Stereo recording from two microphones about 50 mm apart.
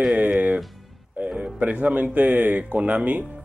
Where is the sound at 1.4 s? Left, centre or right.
Right.